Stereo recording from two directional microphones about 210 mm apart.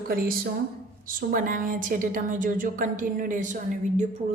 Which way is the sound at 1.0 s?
40° right (ahead or behind).